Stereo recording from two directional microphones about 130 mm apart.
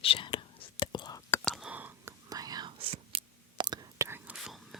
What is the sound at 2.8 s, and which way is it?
Whispering, 50° right (ahead or behind).